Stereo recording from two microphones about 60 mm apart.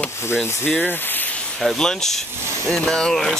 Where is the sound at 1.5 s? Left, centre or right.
Centre.